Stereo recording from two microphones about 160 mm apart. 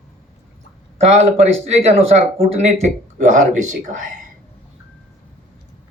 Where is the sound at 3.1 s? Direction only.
50° right (ahead or behind).